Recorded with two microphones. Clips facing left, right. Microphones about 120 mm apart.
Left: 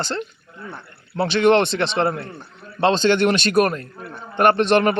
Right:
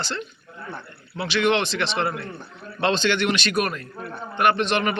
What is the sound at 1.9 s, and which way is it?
A man's voice, 30° left (ahead or behind).